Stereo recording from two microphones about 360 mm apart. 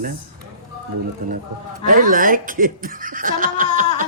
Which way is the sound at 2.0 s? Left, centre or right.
Right.